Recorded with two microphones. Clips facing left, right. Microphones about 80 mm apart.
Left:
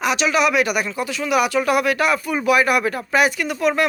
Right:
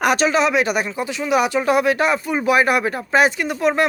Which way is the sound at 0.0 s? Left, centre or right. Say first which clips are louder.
Right 4 dB; right.